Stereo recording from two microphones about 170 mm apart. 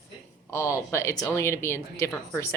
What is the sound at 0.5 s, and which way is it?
Speech, 15° left (ahead or behind).